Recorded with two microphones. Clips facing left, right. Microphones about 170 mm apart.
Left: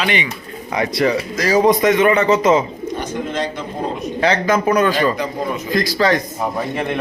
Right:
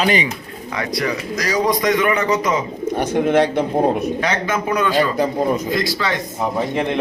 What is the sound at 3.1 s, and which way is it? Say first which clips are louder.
Speech: right 11 dB; 60° right (ahead or behind).